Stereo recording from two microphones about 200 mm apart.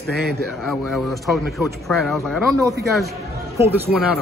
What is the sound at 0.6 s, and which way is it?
Speech, centre (ahead or behind).